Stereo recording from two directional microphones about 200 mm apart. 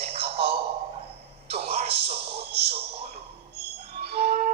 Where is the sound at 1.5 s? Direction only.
30° right (ahead or behind).